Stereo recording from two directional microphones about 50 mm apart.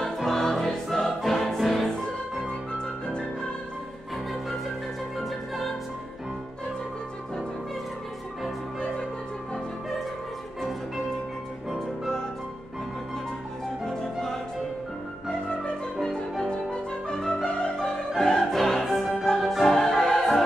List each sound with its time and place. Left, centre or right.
0.0 s music: centre
5.1 s music: centre
13.8 s music: centre
18.1 s opera: centre
19.6 s music: centre